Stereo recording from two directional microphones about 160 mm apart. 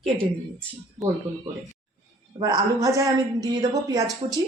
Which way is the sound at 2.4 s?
20° right (ahead or behind).